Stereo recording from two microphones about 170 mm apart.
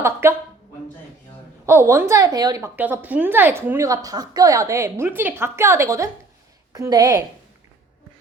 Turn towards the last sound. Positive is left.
turn(degrees=-20)  # may be behind; listen again after turning